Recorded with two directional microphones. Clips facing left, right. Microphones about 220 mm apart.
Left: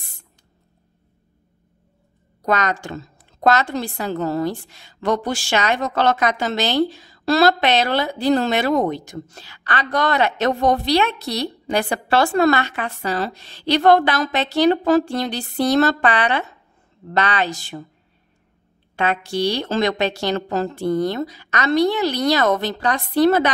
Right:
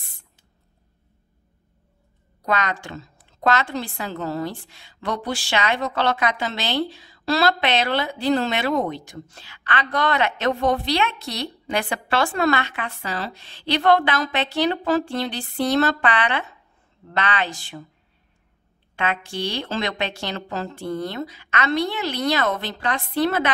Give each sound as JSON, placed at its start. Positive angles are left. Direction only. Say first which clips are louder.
{"t": 2.4, "sound": "a woman's voice", "louder": "left 4 dB", "side_deg": 45}
{"t": 18.9, "sound": "a woman's voice", "louder": "left 5 dB", "side_deg": 40}